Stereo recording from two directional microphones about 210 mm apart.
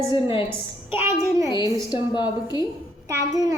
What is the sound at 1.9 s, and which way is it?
Speech, 20° left (ahead or behind).